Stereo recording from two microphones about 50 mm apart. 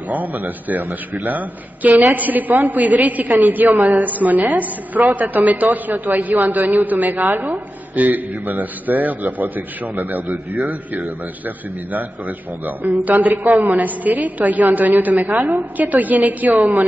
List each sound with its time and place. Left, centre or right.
0.1 s a man's voice: right